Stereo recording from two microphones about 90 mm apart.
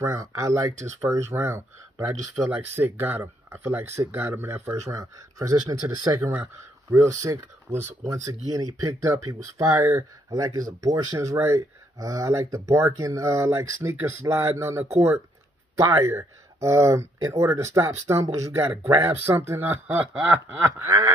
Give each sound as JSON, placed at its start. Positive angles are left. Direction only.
{"t": 0.0, "sound": "speech", "side_deg": -35}
{"t": 4.8, "sound": "speech", "side_deg": -40}
{"t": 6.2, "sound": "speech", "side_deg": -25}
{"t": 7.1, "sound": "speech", "side_deg": -35}